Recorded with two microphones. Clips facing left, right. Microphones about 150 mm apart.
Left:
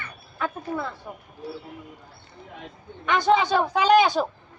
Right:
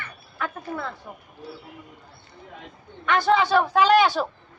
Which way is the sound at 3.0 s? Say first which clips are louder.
Even; 20° left (ahead or behind).